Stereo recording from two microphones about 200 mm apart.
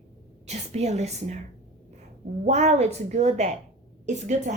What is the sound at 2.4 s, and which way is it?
Speech, 35° right (ahead or behind).